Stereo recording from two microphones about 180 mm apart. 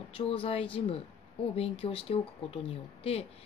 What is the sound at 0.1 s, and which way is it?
A woman's voice, 30° left (ahead or behind).